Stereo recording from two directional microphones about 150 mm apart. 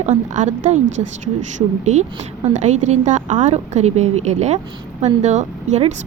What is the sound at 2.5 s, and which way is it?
Speech, 50° right (ahead or behind).